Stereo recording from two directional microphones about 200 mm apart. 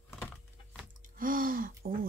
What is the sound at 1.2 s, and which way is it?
Gasp, 45° right (ahead or behind).